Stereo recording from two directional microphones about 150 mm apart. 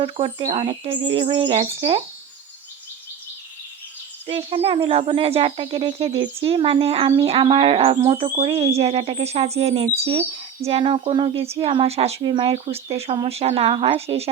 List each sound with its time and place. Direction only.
0.0 s speech: 40° right (ahead or behind)
4.3 s a woman's voice: 40° right (ahead or behind)